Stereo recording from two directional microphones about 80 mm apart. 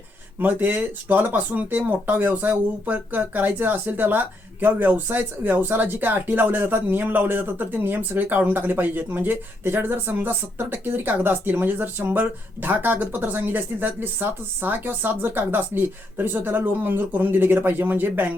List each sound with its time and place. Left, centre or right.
0.3 s speech: right